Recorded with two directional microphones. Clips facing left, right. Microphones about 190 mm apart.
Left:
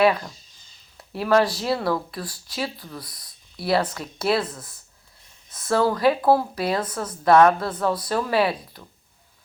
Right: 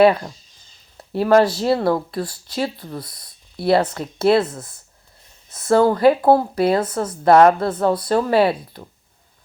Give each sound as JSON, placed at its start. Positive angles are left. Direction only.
{"t": 0.0, "sound": "speech", "side_deg": -30}